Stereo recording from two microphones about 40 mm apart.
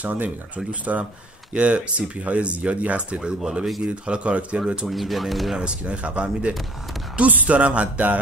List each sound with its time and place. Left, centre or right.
0.7 s speech: right
3.4 s speech: centre
4.0 s speech: right
4.8 s speech: centre
5.6 s speech: right